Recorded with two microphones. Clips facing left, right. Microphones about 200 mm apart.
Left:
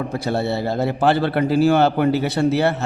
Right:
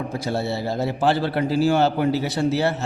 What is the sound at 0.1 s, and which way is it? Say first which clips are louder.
Speech: left 3 dB; 60° left (ahead or behind).